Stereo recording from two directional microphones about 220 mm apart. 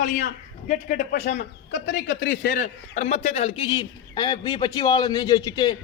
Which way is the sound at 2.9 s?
30° left (ahead or behind).